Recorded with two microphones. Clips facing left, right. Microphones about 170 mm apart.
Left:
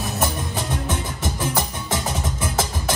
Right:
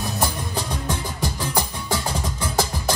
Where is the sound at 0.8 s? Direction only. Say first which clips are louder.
Even; 20° left (ahead or behind).